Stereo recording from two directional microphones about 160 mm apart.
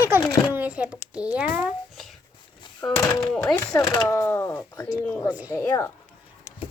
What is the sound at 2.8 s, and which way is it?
Speech, 15° left (ahead or behind).